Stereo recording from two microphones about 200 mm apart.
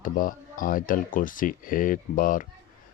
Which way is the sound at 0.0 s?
45° left (ahead or behind).